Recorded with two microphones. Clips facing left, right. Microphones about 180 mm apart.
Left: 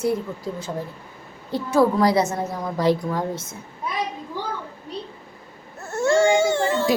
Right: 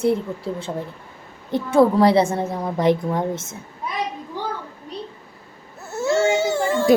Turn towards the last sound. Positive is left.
turn(degrees=-10)  # may be behind; listen again after turning